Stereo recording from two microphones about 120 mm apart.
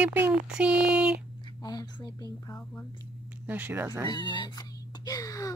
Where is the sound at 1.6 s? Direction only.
35° left (ahead or behind).